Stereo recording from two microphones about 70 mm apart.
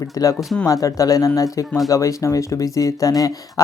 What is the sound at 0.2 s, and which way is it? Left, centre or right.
Speech, left.